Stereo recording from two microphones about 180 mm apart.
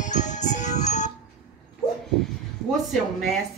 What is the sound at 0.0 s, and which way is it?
Music, 45° left (ahead or behind).